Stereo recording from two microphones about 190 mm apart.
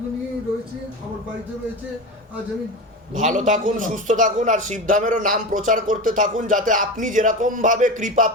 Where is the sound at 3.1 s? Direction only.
40° right (ahead or behind).